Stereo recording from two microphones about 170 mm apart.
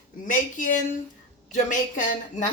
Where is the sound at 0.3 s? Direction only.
50° left (ahead or behind).